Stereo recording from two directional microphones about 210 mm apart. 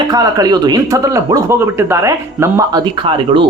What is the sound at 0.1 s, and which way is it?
A woman's voice, 20° right (ahead or behind).